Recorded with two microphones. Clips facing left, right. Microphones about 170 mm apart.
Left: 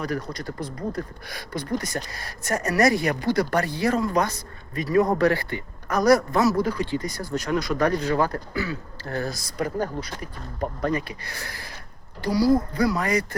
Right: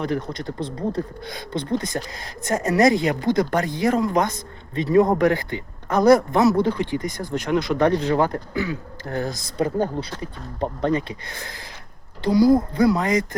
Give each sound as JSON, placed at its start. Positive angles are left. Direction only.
{"t": 0.0, "sound": "a man's voice", "side_deg": -20}